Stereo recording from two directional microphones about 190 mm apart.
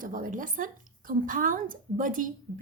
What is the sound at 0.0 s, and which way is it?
A woman's voice, 45° right (ahead or behind).